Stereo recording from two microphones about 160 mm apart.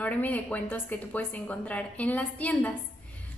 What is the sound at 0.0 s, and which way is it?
A woman's voice, 10° left (ahead or behind).